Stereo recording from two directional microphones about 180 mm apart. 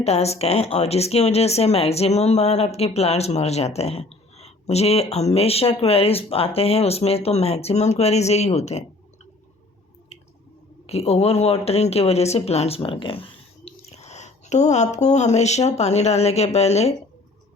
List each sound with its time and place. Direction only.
0.0 s speech: 35° left (ahead or behind)
10.8 s speech: 35° left (ahead or behind)